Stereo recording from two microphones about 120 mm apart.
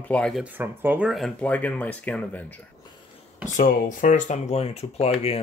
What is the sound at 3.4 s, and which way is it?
Speech, 90° left.